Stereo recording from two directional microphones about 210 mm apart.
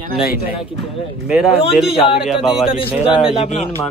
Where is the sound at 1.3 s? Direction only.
Centre (ahead or behind).